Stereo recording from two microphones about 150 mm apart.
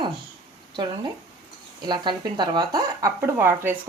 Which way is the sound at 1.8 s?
30° right (ahead or behind).